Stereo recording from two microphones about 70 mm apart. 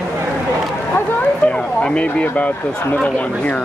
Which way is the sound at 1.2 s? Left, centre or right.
Centre.